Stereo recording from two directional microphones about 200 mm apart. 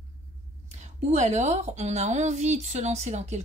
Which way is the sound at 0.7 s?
35° right (ahead or behind).